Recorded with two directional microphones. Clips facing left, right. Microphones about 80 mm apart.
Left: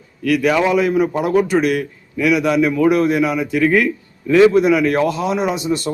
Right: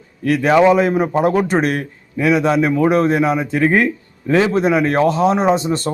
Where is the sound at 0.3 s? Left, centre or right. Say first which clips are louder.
Right 3 dB; right.